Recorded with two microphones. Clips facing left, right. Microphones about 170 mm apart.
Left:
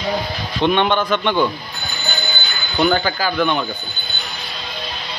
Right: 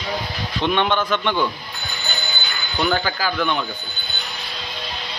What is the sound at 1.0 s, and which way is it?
Speech, 15° left (ahead or behind).